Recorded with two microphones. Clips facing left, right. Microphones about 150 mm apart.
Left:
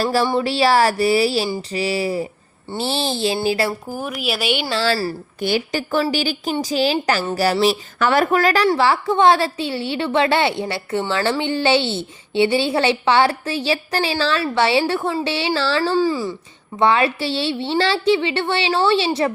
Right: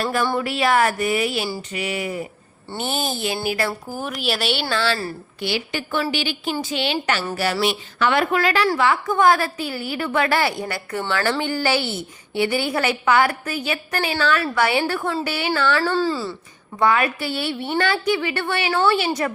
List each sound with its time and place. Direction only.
0.0 s a woman's voice: 30° left (ahead or behind)
3.9 s speech: 5° left (ahead or behind)
4.7 s a woman's voice: 35° left (ahead or behind)
8.6 s a woman's voice: 30° left (ahead or behind)
15.8 s speech: 15° left (ahead or behind)
16.7 s a woman's voice: 25° left (ahead or behind)